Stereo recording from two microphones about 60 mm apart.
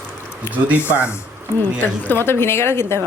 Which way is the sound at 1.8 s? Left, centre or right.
Left.